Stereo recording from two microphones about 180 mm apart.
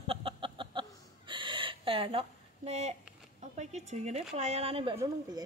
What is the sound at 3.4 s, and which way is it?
Speech, 40° right (ahead or behind).